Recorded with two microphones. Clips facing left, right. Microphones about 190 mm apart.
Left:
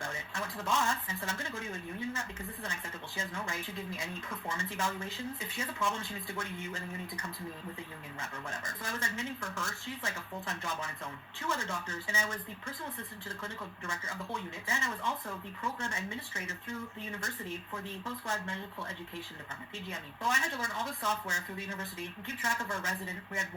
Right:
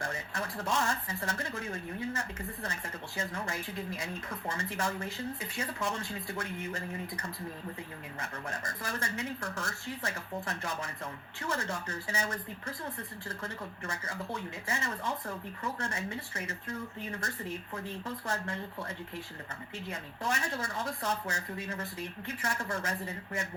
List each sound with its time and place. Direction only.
0.0 s speech: 35° right (ahead or behind)
8.2 s speech: 35° right (ahead or behind)